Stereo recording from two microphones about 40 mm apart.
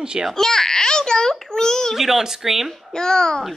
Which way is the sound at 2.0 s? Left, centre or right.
Centre.